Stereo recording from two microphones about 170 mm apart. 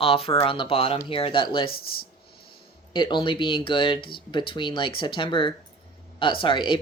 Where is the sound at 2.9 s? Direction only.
25° left (ahead or behind).